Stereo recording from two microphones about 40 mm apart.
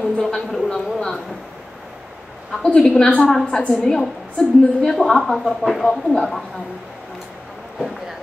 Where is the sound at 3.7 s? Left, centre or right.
Centre.